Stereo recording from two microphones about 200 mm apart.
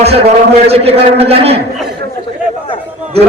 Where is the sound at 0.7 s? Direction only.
30° right (ahead or behind).